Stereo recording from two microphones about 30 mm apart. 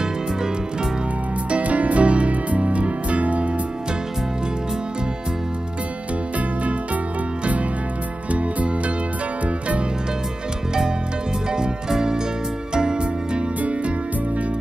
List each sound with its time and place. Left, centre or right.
1.5 s music: right
8.3 s music: right
12.7 s music: right
13.6 s music: right